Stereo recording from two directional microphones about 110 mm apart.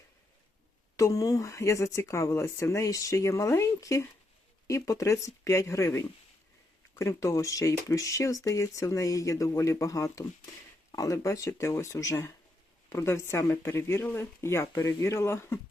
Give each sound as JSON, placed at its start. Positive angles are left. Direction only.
{"t": 0.9, "sound": "speech", "side_deg": 30}